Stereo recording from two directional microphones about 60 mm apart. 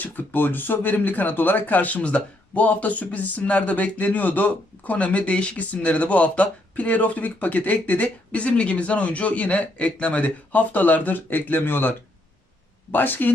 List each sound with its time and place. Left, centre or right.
0.0 s speech: left